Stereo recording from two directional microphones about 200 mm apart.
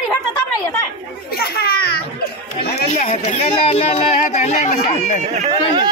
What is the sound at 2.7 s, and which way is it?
Speech, 40° left (ahead or behind).